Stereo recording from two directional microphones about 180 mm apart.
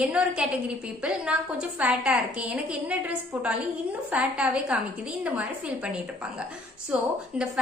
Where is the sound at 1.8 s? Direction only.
5° right (ahead or behind).